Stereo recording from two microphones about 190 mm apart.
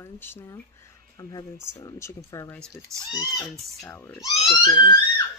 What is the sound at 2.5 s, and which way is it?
Speech, 5° left (ahead or behind).